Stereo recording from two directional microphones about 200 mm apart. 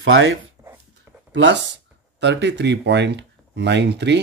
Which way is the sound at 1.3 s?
65° right (ahead or behind).